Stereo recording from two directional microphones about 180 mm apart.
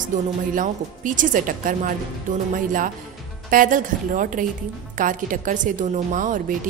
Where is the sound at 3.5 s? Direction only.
50° right (ahead or behind).